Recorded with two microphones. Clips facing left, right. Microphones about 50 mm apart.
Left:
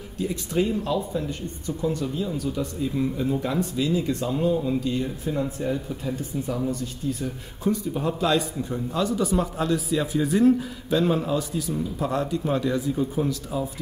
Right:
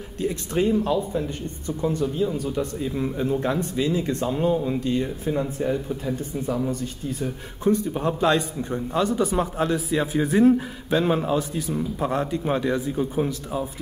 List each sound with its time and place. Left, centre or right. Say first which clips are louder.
0.5 s speech: right 3 dB; right
5.0 s speech: right 2 dB; right